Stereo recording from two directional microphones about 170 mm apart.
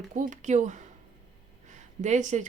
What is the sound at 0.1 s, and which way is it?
Speech, 45° right (ahead or behind).